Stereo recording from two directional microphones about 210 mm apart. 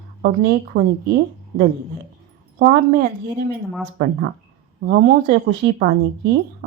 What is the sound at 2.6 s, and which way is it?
Speech, 45° right (ahead or behind).